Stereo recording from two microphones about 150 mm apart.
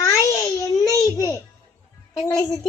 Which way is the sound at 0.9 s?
20° left (ahead or behind).